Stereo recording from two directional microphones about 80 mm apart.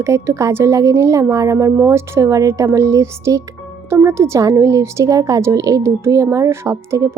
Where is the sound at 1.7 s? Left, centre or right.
Right.